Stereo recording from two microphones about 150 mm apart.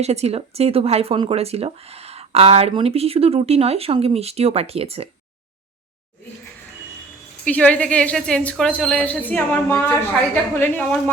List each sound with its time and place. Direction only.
0.0 s speech: 45° right (ahead or behind)
7.4 s a woman's voice: 10° left (ahead or behind)